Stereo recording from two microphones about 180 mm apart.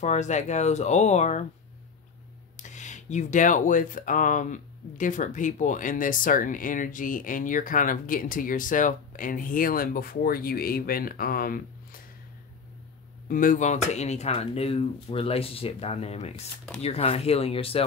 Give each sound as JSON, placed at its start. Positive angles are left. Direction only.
{"t": 0.0, "sound": "speech", "side_deg": 40}
{"t": 2.5, "sound": "speech", "side_deg": 40}
{"t": 13.3, "sound": "speech", "side_deg": 50}